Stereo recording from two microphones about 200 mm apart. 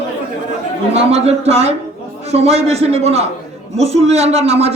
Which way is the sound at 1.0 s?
30° right (ahead or behind).